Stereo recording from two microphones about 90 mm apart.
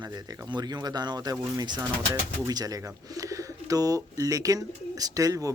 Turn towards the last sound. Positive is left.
turn(degrees=-40)  # may be behind; listen again after turning